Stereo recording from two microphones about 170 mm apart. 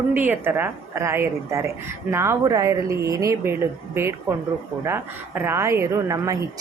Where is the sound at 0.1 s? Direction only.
10° right (ahead or behind).